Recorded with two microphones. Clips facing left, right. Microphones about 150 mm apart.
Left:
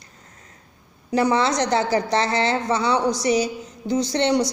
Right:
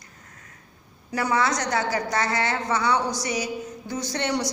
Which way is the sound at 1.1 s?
30° left (ahead or behind).